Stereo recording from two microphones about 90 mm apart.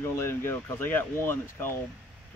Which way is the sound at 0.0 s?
30° left (ahead or behind).